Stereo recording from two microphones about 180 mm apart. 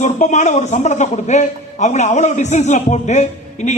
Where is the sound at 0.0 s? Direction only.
40° left (ahead or behind).